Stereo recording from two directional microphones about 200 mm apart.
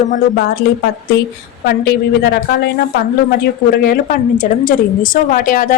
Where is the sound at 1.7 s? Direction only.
55° left (ahead or behind).